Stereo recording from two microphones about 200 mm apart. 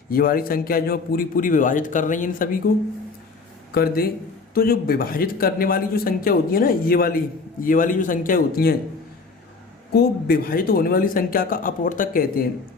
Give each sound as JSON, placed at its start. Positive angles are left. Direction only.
{"t": 0.1, "sound": "a man's voice", "side_deg": 45}
{"t": 9.9, "sound": "a man's voice", "side_deg": 50}